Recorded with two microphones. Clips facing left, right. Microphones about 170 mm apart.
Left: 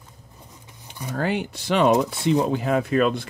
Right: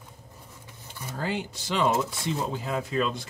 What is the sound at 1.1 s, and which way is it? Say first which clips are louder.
Speech: left 6 dB; 65° left (ahead or behind).